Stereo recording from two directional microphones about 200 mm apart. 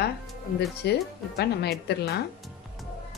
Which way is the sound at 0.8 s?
55° left (ahead or behind).